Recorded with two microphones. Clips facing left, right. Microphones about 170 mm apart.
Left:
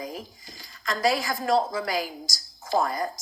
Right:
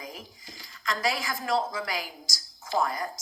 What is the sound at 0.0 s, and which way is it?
Speech, 40° left (ahead or behind).